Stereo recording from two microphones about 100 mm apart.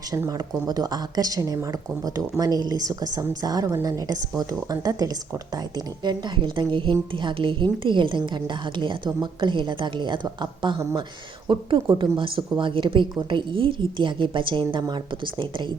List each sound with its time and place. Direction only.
0.3 s a woman's voice: 40° right (ahead or behind)